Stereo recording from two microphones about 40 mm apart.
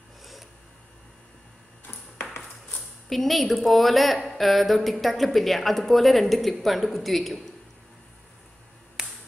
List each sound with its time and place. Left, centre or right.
0.2 s a sound: centre
3.1 s speech: centre
9.0 s finger snapping: centre